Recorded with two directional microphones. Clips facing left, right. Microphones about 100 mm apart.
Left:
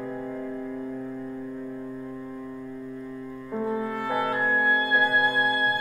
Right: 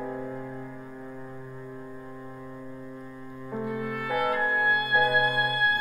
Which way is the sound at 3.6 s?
30° left (ahead or behind).